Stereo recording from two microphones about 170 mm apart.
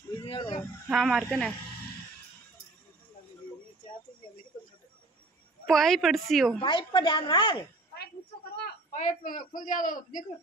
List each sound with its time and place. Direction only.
0.1 s a sound: 30° left (ahead or behind)
0.8 s a woman's voice: centre (ahead or behind)
5.7 s a woman's voice: centre (ahead or behind)
6.6 s a woman's voice: 30° left (ahead or behind)
8.9 s a man's voice: 50° left (ahead or behind)